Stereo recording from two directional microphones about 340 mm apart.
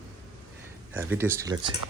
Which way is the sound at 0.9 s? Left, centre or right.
Centre.